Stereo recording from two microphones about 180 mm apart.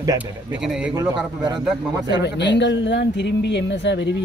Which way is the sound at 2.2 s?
75° left (ahead or behind).